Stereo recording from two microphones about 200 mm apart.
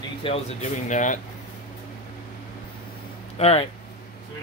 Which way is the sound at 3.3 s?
30° left (ahead or behind).